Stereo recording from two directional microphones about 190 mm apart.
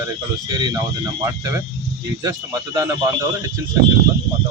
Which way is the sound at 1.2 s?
15° right (ahead or behind).